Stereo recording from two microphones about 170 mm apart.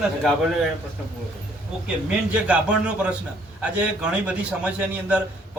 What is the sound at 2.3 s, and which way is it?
Speech, 5° right (ahead or behind).